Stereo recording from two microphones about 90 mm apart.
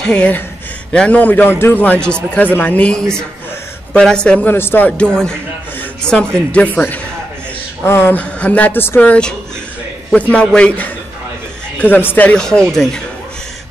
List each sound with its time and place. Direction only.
0.0 s a man's voice: 10° left (ahead or behind)
4.5 s a man's voice: 25° left (ahead or behind)
8.2 s a man's voice: 15° left (ahead or behind)
10.3 s a man's voice: 10° left (ahead or behind)
11.8 s speech: 20° left (ahead or behind)
12.4 s a man's voice: 10° left (ahead or behind)